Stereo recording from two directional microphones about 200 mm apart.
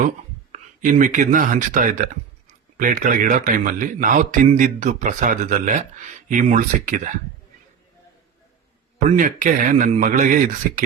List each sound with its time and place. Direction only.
0.5 s speech: 40° right (ahead or behind)
9.0 s speech: 40° right (ahead or behind)